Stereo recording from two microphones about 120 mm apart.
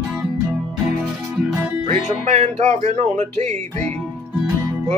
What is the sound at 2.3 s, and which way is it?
Speech, 65° right (ahead or behind).